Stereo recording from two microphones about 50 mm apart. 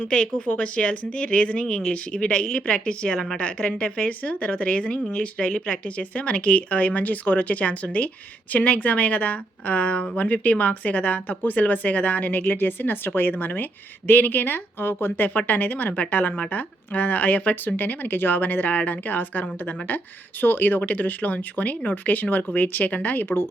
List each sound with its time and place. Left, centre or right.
0.0 s a woman's voice: left